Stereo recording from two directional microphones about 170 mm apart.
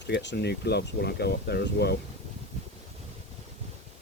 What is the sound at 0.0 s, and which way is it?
Speech, 90° left.